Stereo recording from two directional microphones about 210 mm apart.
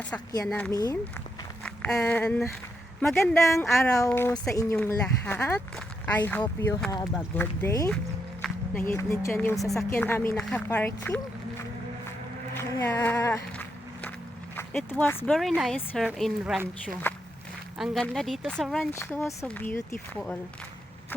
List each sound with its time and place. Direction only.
0.4 s speech: 5° left (ahead or behind)
0.7 s speech: 20° left (ahead or behind)
1.6 s speech: 5° left (ahead or behind)
3.3 s speech: 15° left (ahead or behind)
12.5 s skateboard: 10° left (ahead or behind)
14.5 s speech: 5° left (ahead or behind)
17.7 s speech: centre (ahead or behind)